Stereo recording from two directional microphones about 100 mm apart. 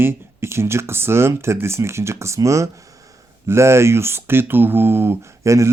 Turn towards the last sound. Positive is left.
turn(degrees=-30)  # may be behind; listen again after turning